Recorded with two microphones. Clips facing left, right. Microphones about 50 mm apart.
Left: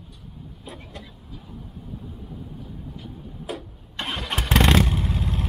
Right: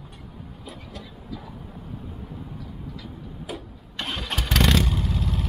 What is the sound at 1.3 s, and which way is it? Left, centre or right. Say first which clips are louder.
Vehicle: right 3 dB; right.